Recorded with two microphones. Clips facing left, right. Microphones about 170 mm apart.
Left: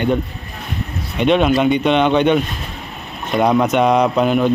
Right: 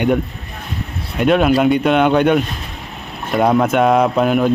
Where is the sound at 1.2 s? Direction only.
5° right (ahead or behind).